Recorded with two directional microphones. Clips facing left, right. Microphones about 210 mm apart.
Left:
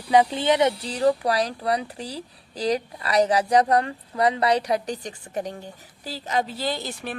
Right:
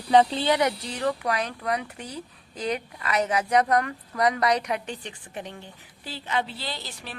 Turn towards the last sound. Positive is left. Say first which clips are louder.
# left 8 dB
turn(degrees=50)  # may be behind; listen again after turning